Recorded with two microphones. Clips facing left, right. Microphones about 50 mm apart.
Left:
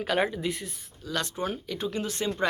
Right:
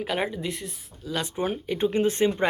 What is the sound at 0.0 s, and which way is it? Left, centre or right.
Speech, centre.